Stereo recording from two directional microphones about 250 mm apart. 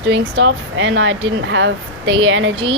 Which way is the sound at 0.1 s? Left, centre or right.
Right.